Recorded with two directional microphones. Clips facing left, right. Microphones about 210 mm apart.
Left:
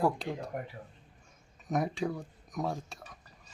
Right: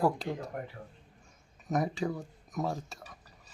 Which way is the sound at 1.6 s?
Centre (ahead or behind).